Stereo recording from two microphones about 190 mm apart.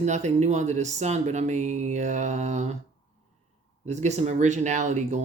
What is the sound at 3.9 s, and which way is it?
Speech, 35° right (ahead or behind).